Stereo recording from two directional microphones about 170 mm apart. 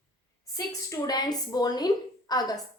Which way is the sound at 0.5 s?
20° left (ahead or behind).